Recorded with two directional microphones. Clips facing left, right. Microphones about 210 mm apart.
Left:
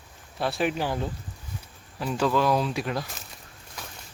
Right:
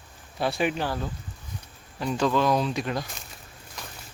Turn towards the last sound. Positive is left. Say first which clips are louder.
# even
turn(degrees=0)  # may be behind; listen again after turning